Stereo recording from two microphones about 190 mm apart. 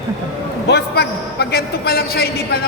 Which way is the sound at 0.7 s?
60° left (ahead or behind).